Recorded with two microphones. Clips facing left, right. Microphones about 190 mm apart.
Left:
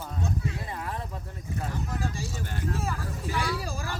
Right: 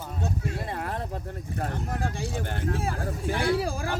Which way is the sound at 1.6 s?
55° right (ahead or behind).